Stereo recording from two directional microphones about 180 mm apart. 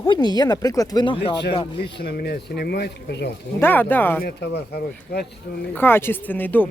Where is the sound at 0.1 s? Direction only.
25° left (ahead or behind).